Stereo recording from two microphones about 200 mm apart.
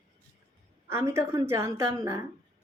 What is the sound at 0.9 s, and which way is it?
A woman's voice, 15° right (ahead or behind).